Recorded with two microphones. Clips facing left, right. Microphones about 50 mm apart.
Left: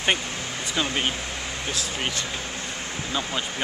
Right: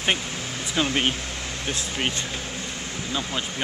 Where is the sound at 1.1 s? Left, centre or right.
Centre.